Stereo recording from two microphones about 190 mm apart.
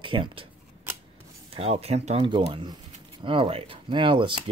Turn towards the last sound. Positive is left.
turn(degrees=-25)  # may be behind; listen again after turning